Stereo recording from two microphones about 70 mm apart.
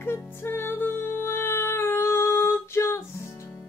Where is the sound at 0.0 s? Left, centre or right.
Left.